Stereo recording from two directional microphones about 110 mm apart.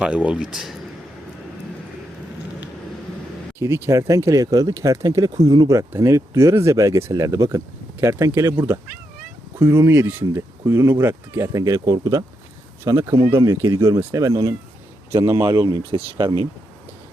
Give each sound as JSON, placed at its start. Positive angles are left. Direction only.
{"t": 0.0, "sound": "speech", "side_deg": -10}
{"t": 3.6, "sound": "speech", "side_deg": -25}
{"t": 15.9, "sound": "speech", "side_deg": -45}